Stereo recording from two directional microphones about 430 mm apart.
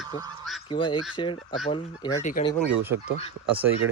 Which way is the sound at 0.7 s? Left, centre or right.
Centre.